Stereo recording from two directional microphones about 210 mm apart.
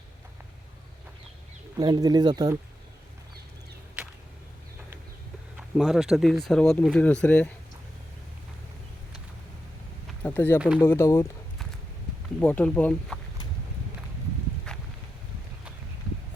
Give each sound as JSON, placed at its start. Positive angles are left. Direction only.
{"t": 1.8, "sound": "speech", "side_deg": -20}
{"t": 5.5, "sound": "speech", "side_deg": 0}
{"t": 10.2, "sound": "speech", "side_deg": 10}
{"t": 12.4, "sound": "speech", "side_deg": 10}
{"t": 14.7, "sound": "walk", "side_deg": 5}